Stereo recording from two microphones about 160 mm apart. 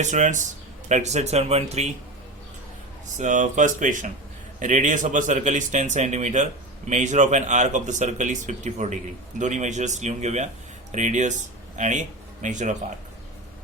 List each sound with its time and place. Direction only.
0.0 s speech: 50° right (ahead or behind)
3.2 s speech: 50° right (ahead or behind)